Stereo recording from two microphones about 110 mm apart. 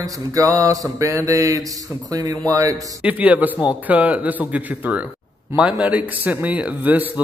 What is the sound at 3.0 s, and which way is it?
A man's voice, 15° right (ahead or behind).